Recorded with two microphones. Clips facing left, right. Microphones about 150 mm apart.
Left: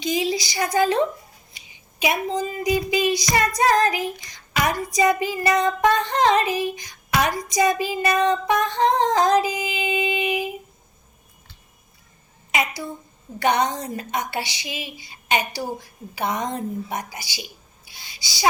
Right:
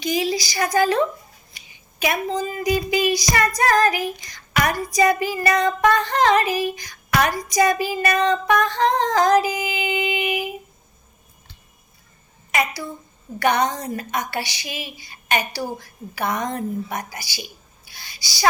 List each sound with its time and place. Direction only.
0.0 s female singing: 20° left (ahead or behind)
1.5 s speech: 20° left (ahead or behind)
3.6 s female singing: 25° left (ahead or behind)
12.5 s a child's voice: 20° left (ahead or behind)
13.4 s female singing: 25° left (ahead or behind)
17.8 s owl: 20° left (ahead or behind)